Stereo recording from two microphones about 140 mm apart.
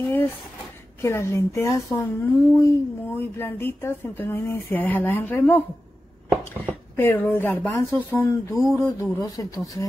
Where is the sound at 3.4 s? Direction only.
15° left (ahead or behind).